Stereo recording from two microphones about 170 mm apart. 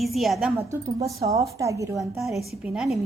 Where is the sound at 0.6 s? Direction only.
20° right (ahead or behind).